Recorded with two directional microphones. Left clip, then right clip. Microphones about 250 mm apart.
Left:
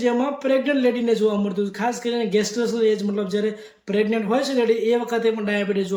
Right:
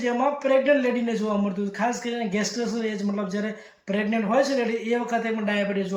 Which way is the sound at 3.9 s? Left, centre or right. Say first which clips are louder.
Left 4 dB; centre.